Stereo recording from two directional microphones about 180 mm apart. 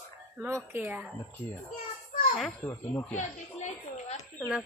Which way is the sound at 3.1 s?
40° left (ahead or behind).